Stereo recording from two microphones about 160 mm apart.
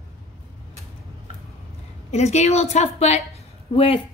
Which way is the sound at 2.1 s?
45° left (ahead or behind).